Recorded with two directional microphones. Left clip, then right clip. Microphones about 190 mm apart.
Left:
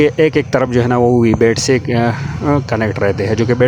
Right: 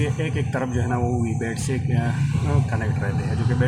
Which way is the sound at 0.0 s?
50° left (ahead or behind).